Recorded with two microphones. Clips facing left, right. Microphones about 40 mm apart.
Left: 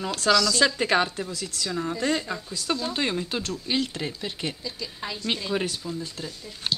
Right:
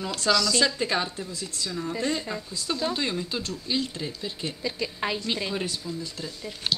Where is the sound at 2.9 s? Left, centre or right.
Left.